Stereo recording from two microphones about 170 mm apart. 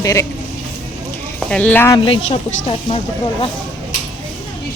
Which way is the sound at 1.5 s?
10° left (ahead or behind).